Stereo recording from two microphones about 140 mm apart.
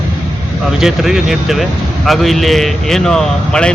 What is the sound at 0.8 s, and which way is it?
A man's voice, 5° right (ahead or behind).